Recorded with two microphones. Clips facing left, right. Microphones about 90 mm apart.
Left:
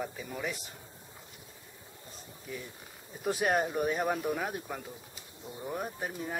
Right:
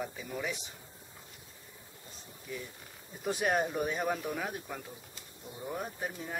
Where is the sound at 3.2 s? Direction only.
Centre (ahead or behind).